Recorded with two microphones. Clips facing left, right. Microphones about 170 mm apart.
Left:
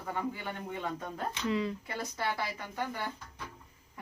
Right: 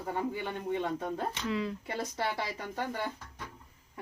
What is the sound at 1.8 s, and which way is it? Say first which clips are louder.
Speech: right 1 dB; 25° right (ahead or behind).